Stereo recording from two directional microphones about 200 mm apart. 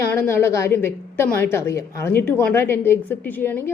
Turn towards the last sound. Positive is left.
turn(degrees=10)  # may be behind; listen again after turning